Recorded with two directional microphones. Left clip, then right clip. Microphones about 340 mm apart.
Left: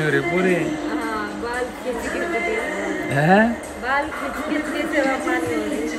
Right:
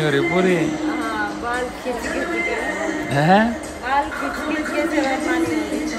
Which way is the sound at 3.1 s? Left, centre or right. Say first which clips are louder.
Right 1 dB; centre.